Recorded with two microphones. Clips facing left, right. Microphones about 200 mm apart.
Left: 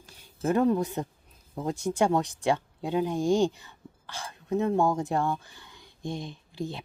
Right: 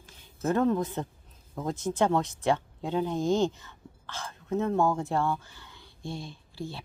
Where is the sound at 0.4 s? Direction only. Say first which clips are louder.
Left 2 dB; 15° left (ahead or behind).